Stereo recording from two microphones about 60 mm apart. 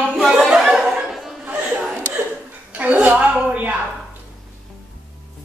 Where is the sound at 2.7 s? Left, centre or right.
Right.